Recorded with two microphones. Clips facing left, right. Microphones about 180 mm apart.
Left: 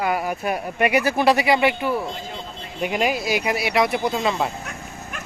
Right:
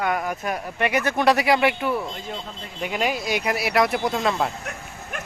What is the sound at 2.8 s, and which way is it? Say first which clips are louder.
Speech: left 3 dB; 15° left (ahead or behind).